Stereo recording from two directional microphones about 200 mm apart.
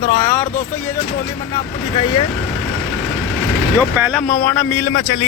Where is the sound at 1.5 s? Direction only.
25° left (ahead or behind).